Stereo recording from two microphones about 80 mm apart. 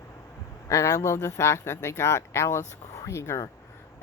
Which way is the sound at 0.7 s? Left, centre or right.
Left.